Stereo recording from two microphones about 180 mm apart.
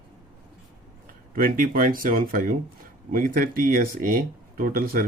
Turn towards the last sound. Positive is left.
turn(degrees=-55)  # may be behind; listen again after turning